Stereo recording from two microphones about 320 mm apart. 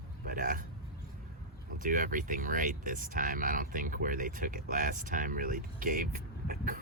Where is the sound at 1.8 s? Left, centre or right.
Right.